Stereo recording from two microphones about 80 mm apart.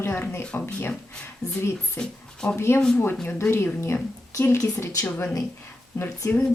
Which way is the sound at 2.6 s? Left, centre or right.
Left.